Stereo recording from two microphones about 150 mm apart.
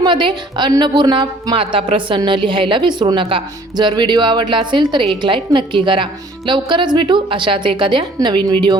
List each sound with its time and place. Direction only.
0.0 s a woman's voice: 30° right (ahead or behind)